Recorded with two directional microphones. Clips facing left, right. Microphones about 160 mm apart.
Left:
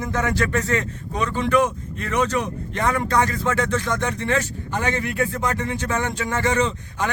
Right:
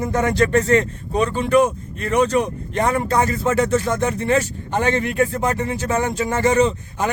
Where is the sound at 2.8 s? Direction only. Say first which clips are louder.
Right 2 dB; 30° right (ahead or behind).